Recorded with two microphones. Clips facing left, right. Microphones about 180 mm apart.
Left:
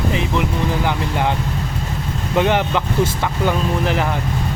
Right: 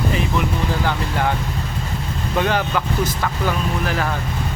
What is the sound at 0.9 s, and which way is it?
Speech, 15° left (ahead or behind).